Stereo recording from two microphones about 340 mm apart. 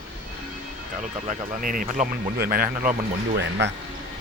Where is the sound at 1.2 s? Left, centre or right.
Right.